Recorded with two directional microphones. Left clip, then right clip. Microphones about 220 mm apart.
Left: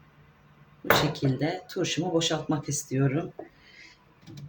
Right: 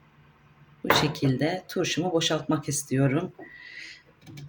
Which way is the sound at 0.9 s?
25° right (ahead or behind).